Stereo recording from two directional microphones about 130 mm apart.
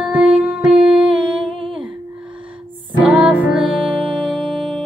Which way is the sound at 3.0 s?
10° right (ahead or behind).